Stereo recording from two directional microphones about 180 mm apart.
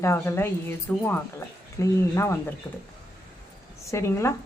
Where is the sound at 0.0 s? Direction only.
15° left (ahead or behind).